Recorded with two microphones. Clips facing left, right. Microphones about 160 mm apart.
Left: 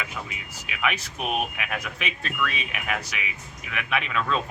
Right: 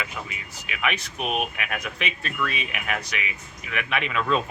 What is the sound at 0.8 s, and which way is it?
Speech, centre (ahead or behind).